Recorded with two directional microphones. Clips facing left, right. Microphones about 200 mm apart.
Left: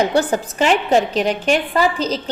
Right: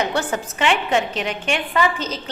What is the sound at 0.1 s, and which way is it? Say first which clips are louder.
A woman's voice: left 6 dB; 35° left (ahead or behind).